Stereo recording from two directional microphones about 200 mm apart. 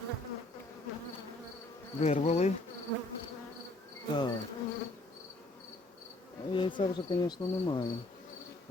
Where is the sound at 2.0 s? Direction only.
30° left (ahead or behind).